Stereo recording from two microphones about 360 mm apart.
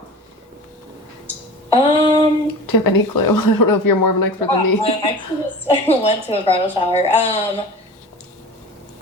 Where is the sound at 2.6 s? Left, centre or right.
Left.